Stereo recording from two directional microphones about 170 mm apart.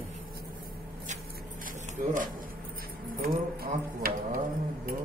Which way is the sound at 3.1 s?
60° right (ahead or behind).